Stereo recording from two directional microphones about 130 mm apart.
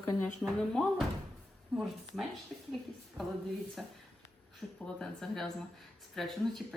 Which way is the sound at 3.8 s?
Centre (ahead or behind).